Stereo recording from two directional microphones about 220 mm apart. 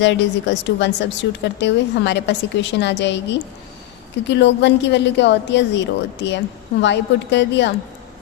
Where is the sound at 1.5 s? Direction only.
50° left (ahead or behind).